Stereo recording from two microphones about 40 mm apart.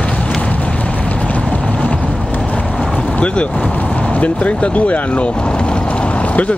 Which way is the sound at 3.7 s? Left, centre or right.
Left.